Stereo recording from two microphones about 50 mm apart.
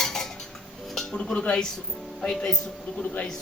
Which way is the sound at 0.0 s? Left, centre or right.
Centre.